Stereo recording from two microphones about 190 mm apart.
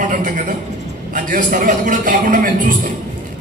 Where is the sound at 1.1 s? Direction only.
45° right (ahead or behind).